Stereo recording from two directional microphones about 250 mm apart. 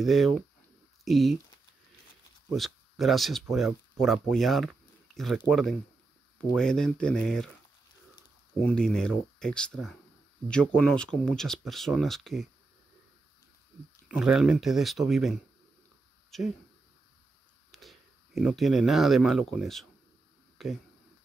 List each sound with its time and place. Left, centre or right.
0.0 s speech: centre
2.5 s speech: centre
14.0 s speech: centre
17.6 s speech: centre
20.5 s a sound: centre